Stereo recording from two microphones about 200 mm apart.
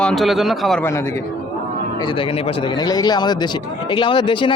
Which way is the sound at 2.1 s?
25° left (ahead or behind).